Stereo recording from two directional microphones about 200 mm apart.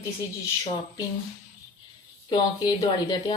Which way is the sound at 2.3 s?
20° left (ahead or behind).